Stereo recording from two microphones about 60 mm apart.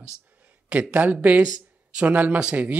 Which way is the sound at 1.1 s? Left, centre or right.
Right.